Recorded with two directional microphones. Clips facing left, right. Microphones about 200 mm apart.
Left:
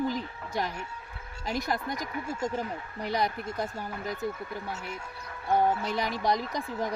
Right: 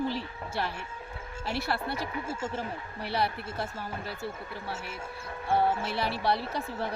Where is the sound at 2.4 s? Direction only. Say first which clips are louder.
Left 6 dB; 40° left (ahead or behind).